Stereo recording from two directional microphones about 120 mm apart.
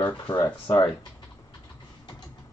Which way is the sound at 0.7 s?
40° left (ahead or behind).